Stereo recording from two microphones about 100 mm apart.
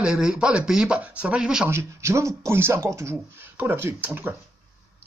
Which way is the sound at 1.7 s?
25° right (ahead or behind).